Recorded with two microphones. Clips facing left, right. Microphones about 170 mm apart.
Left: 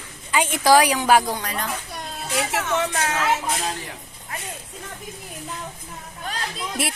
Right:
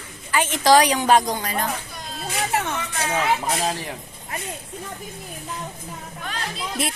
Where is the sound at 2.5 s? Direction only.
75° left (ahead or behind).